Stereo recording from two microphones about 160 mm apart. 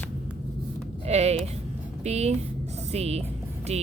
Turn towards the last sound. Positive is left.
turn(degrees=-40)  # may be behind; listen again after turning